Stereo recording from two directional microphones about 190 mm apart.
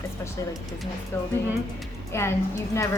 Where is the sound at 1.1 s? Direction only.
15° left (ahead or behind).